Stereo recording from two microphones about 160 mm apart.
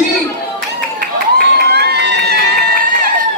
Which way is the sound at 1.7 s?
90° right.